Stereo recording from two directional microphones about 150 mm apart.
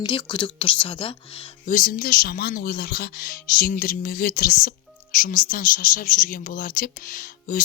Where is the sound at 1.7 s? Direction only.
70° left (ahead or behind).